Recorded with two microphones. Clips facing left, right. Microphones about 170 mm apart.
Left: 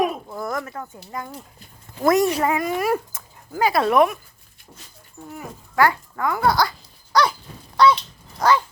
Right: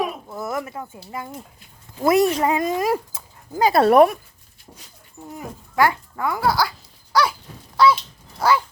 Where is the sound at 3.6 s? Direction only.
35° right (ahead or behind).